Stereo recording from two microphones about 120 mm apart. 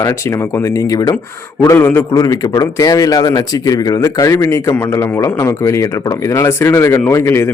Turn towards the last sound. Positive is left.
turn(degrees=20)  # may be behind; listen again after turning